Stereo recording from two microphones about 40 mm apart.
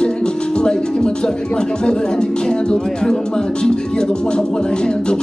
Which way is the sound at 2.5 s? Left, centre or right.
Centre.